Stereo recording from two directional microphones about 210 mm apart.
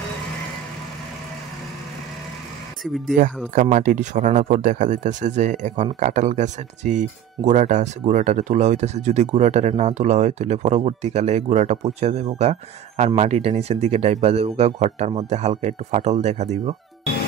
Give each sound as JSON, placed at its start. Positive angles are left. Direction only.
{"t": 2.8, "sound": "speech", "side_deg": 0}
{"t": 3.7, "sound": "speech", "side_deg": -35}